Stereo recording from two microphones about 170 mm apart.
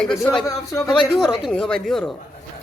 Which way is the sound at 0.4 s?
20° left (ahead or behind).